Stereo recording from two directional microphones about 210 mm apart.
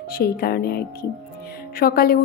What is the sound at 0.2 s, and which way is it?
A woman's voice, 45° left (ahead or behind).